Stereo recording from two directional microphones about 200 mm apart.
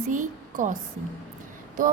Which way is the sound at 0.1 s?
40° right (ahead or behind).